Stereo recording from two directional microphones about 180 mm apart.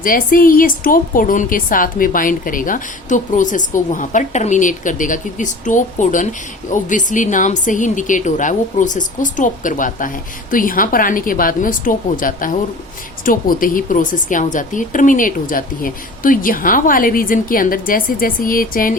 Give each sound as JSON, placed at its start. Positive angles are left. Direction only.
{"t": 0.0, "sound": "a woman's voice", "side_deg": 50}